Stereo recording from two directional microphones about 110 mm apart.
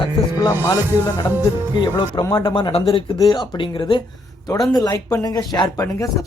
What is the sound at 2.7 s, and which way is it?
Speech, 65° left (ahead or behind).